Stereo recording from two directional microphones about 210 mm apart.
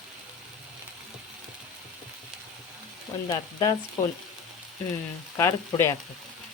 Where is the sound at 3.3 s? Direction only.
20° left (ahead or behind).